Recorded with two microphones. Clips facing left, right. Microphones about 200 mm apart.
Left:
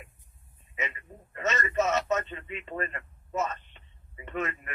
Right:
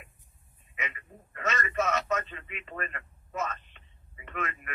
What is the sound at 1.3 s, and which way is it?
A man's voice, 25° left (ahead or behind).